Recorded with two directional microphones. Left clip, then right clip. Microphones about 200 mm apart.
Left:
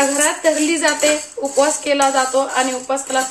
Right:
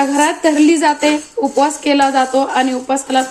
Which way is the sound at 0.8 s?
50° right (ahead or behind).